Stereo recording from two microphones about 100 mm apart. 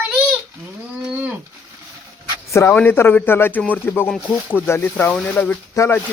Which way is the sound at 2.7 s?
20° left (ahead or behind).